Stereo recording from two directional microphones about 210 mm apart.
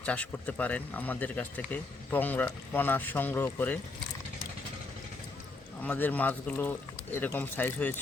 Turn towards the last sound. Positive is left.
turn(degrees=10)  # may be behind; listen again after turning